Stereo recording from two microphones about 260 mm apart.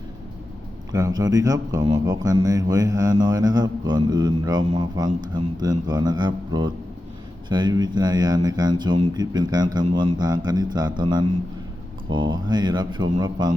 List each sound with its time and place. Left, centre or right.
0.9 s speech: centre